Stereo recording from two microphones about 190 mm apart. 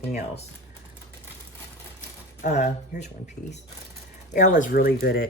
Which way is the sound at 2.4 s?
40° left (ahead or behind).